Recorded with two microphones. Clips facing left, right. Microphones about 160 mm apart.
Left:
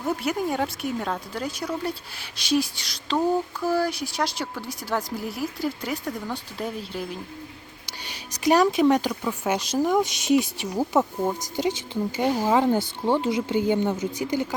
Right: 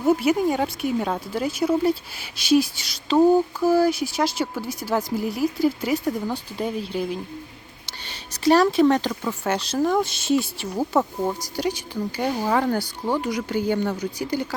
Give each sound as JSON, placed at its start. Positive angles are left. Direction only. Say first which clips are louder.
{"t": 0.2, "sound": "speech", "louder": "right 5 dB", "side_deg": 0}
{"t": 7.9, "sound": "speech", "louder": "left 1 dB", "side_deg": 10}